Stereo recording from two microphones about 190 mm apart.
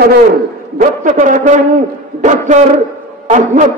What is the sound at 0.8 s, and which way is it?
A man's voice, 40° right (ahead or behind).